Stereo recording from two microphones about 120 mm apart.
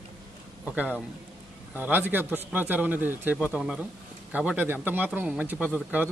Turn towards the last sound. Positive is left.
turn(degrees=-15)  # may be behind; listen again after turning